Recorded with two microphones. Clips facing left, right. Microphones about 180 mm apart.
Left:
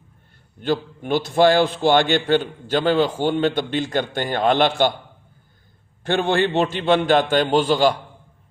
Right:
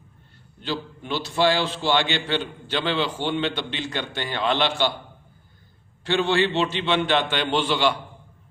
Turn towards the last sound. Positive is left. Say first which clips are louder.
# left 5 dB
turn(degrees=40)  # may be behind; listen again after turning